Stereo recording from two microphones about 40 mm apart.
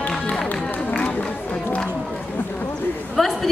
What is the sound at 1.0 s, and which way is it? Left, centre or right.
Run, left.